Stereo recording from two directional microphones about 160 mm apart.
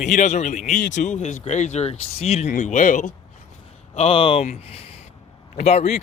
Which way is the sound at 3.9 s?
40° left (ahead or behind).